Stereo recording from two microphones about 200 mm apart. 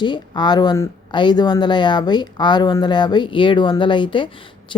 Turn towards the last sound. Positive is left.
turn(degrees=25)  # may be behind; listen again after turning